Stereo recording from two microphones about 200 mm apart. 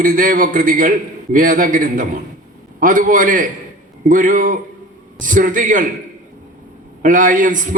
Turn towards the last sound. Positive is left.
turn(degrees=-40)  # may be behind; listen again after turning